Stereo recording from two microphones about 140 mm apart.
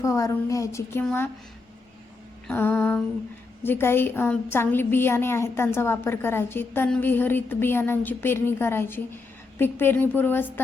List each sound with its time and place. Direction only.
0.0 s a woman's voice: 20° left (ahead or behind)
2.5 s a woman's voice: 10° left (ahead or behind)